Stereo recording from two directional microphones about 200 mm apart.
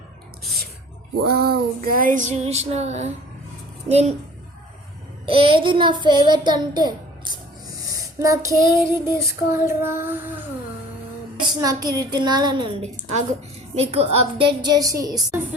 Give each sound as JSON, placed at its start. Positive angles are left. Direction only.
{"t": 1.2, "sound": "female singing", "side_deg": -50}
{"t": 5.2, "sound": "child singing", "side_deg": -25}
{"t": 7.9, "sound": "a sound", "side_deg": -15}
{"t": 8.7, "sound": "child singing", "side_deg": -15}
{"t": 11.3, "sound": "child singing", "side_deg": -20}